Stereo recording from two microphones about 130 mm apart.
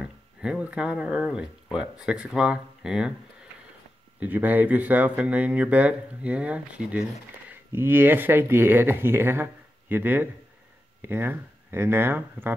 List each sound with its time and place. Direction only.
0.0 s speech: 5° right (ahead or behind)
4.2 s speech: 15° right (ahead or behind)